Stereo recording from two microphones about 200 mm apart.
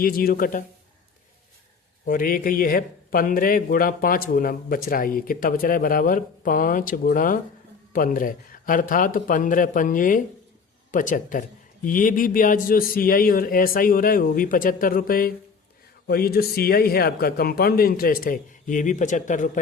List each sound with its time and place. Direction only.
0.0 s a man's voice: 45° left (ahead or behind)
2.0 s a man's voice: 45° left (ahead or behind)